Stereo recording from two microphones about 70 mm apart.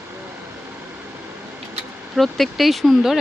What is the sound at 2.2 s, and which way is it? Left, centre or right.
Speech, centre.